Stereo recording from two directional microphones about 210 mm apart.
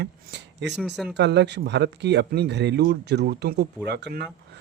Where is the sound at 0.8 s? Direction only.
Centre (ahead or behind).